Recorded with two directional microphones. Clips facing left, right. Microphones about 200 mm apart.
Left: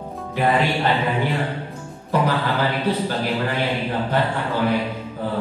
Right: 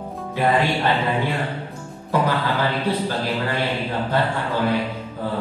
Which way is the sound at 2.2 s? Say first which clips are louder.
Even; 10° left (ahead or behind).